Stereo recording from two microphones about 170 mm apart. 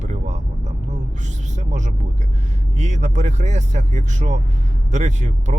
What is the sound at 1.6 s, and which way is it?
Speech, 45° right (ahead or behind).